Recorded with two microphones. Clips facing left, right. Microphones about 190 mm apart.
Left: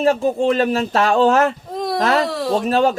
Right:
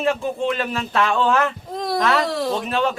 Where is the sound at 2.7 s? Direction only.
40° left (ahead or behind).